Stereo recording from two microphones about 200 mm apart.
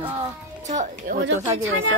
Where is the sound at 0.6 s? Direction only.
35° right (ahead or behind).